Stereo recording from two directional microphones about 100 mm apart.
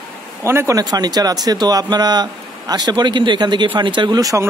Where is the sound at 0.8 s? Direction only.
40° right (ahead or behind).